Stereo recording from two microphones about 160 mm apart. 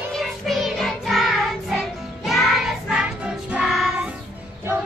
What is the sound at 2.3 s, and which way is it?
Child singing, centre (ahead or behind).